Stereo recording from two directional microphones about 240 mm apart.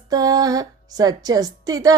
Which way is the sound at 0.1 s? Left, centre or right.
Centre.